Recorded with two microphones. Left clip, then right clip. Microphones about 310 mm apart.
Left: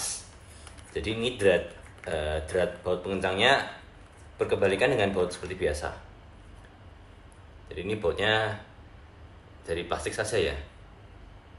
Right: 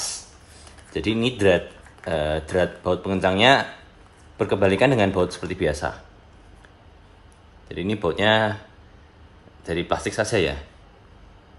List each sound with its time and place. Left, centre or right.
0.9 s speech: right
7.6 s speech: right
9.7 s speech: right